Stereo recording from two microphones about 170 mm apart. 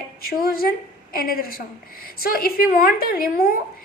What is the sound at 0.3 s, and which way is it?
A woman's voice, 60° left (ahead or behind).